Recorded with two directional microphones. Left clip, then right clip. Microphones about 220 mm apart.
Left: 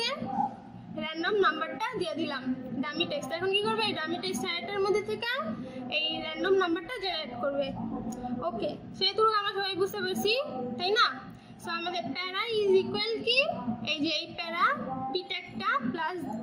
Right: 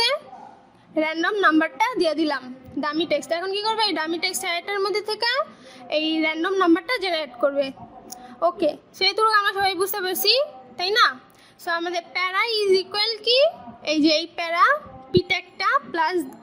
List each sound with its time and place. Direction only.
0.9 s a woman's voice: 50° right (ahead or behind)